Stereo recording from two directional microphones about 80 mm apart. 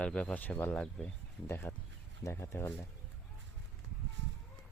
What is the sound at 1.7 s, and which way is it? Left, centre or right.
Speech, left.